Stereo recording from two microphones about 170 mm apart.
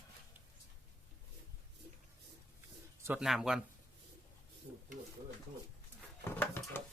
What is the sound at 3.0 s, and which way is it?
Speech, 5° right (ahead or behind).